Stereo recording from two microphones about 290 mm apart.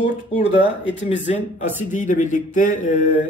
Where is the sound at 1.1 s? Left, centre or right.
Left.